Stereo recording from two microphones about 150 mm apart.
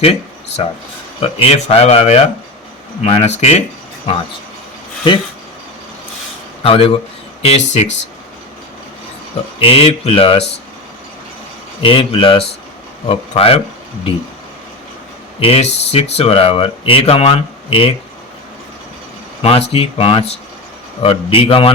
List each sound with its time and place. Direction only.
0.0 s a sound: 40° left (ahead or behind)
1.2 s speech: 40° left (ahead or behind)
6.6 s speech: 40° left (ahead or behind)
9.6 s speech: 40° left (ahead or behind)
11.8 s speech: 35° left (ahead or behind)
15.4 s speech: 40° left (ahead or behind)
19.4 s speech: 40° left (ahead or behind)